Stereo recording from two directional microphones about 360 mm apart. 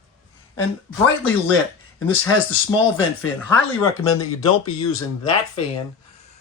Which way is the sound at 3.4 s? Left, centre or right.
Centre.